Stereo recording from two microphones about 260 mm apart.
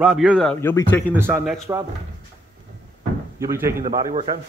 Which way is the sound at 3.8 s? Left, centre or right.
Right.